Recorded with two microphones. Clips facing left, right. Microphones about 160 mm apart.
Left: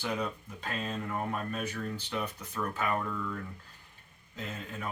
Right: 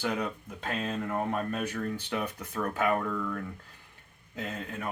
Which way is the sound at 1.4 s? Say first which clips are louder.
Right 4 dB; 70° right (ahead or behind).